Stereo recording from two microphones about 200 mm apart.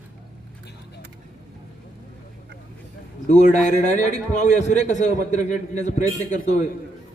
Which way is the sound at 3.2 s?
35° left (ahead or behind).